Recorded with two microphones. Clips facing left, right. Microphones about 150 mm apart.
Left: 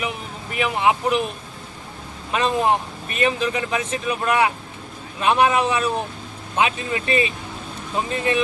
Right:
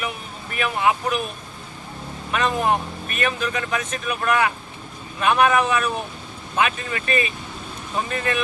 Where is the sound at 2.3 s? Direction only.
25° left (ahead or behind).